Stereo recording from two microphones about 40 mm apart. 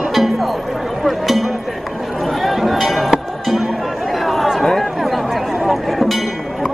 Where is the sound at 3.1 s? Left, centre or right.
Centre.